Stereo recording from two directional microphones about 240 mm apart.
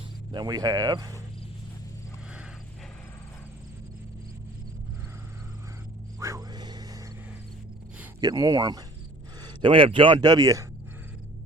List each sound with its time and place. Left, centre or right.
0.3 s speech: centre
6.1 s a sound: centre
7.9 s speech: centre